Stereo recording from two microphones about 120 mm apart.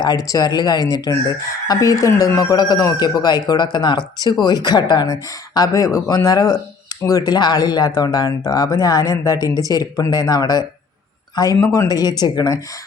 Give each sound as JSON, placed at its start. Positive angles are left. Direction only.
{"t": 0.0, "sound": "speech", "side_deg": 30}
{"t": 11.7, "sound": "speech", "side_deg": 30}